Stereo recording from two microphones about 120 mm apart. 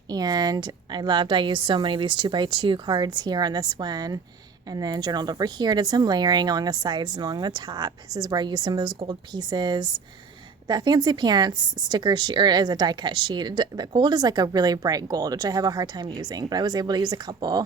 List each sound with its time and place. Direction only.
0.1 s speech: 35° right (ahead or behind)